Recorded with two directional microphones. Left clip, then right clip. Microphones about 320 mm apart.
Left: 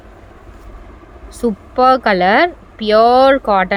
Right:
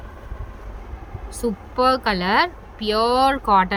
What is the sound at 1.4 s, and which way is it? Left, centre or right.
Speech, centre.